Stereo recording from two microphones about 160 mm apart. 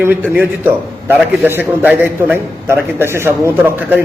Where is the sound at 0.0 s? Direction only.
10° right (ahead or behind).